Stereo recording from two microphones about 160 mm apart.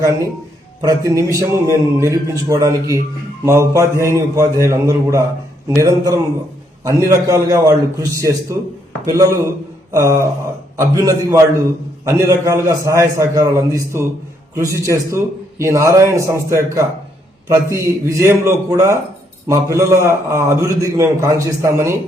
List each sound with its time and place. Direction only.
0.0 s a man's voice: 20° right (ahead or behind)
9.9 s a sound: 20° right (ahead or behind)
10.8 s a man's voice: 20° right (ahead or behind)